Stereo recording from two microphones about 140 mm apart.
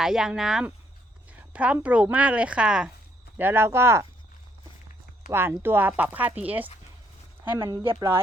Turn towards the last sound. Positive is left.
turn(degrees=-20)  # may be behind; listen again after turning